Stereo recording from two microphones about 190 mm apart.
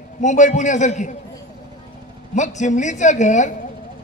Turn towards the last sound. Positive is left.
turn(degrees=40)  # may be behind; listen again after turning